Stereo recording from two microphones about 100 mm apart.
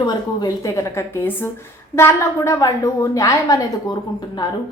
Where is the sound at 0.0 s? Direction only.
45° left (ahead or behind).